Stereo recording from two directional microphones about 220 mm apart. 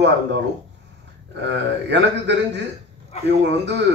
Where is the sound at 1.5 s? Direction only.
55° right (ahead or behind).